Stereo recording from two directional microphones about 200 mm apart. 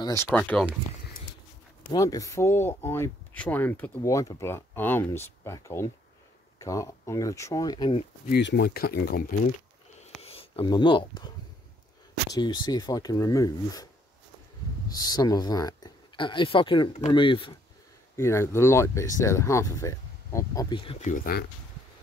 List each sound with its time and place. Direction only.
0.0 s speech: 15° left (ahead or behind)
1.9 s speech: 20° left (ahead or behind)
8.3 s speech: 60° left (ahead or behind)
10.2 s speech: 30° left (ahead or behind)
12.4 s speech: 20° left (ahead or behind)
14.9 s speech: 20° left (ahead or behind)
18.1 s speech: 15° left (ahead or behind)
21.1 s speech: 45° left (ahead or behind)